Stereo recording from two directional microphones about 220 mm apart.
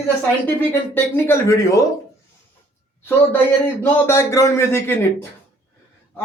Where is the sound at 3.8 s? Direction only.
10° left (ahead or behind).